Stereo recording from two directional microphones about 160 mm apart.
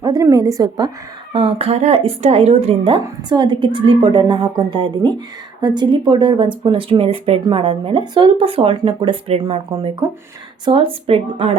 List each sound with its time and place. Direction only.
0.0 s speech: 25° right (ahead or behind)
1.3 s speech: 35° right (ahead or behind)
10.7 s speech: 35° right (ahead or behind)